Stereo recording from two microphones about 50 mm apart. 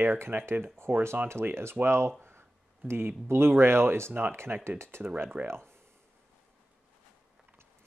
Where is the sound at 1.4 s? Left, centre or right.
Right.